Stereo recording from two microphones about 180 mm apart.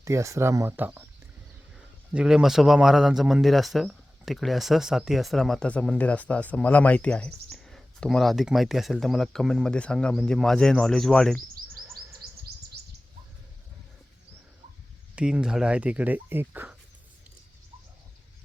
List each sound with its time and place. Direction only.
0.0 s a man's voice: 15° right (ahead or behind); by 11.3 s centre (ahead or behind)
15.1 s speech: 5° right (ahead or behind)